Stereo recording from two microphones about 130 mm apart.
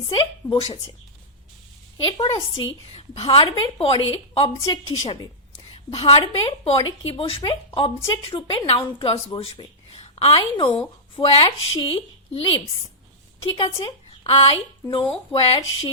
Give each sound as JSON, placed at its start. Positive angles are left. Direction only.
{"t": 0.1, "sound": "a woman's voice", "side_deg": 40}
{"t": 2.0, "sound": "a woman's voice", "side_deg": 40}
{"t": 14.3, "sound": "a woman's voice", "side_deg": 45}